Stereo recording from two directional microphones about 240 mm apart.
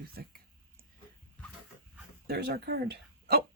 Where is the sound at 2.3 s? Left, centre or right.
Right.